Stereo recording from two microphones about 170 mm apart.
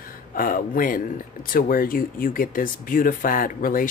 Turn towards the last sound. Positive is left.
turn(degrees=55)  # may be behind; listen again after turning